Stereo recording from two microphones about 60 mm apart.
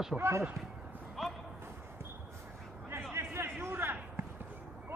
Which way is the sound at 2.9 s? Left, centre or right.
Right.